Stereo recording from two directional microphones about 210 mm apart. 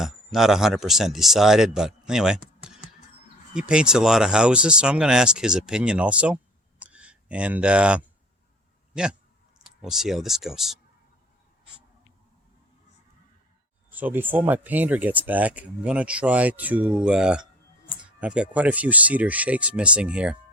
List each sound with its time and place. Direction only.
0.0 s a man's voice: centre (ahead or behind)
13.9 s speech: 10° right (ahead or behind)